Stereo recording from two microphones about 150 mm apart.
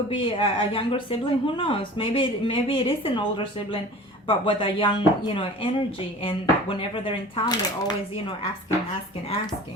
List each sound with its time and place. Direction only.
0.1 s speech: 35° left (ahead or behind)